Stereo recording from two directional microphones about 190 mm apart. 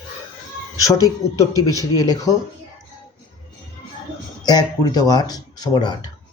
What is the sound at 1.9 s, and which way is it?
Speech, 20° left (ahead or behind).